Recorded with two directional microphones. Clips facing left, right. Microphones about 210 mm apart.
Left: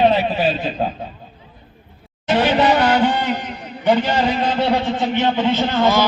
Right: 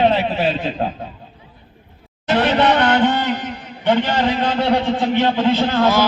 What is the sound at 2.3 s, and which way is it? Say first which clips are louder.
A man's voice: even; 5° left (ahead or behind).